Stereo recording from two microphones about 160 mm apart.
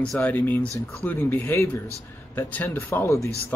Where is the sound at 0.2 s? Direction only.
10° left (ahead or behind).